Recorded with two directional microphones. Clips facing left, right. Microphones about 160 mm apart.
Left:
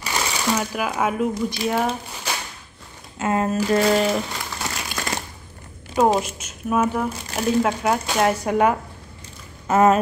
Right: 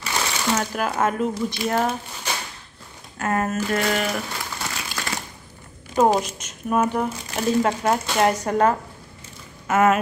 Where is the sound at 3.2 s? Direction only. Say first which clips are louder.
Left 2 dB; 20° left (ahead or behind).